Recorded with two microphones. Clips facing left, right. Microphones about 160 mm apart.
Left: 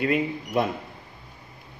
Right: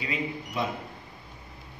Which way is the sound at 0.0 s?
55° left (ahead or behind).